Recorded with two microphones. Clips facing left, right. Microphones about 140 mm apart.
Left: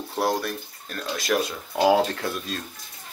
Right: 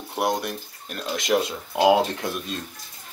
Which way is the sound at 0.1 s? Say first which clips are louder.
Even; 20° right (ahead or behind).